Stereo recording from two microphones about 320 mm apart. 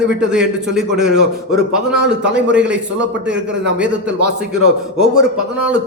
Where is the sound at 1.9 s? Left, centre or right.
Right.